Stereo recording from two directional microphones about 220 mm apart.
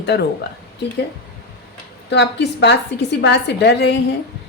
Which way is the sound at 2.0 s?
50° left (ahead or behind).